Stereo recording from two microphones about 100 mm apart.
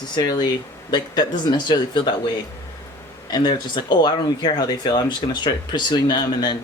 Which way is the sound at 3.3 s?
50° left (ahead or behind).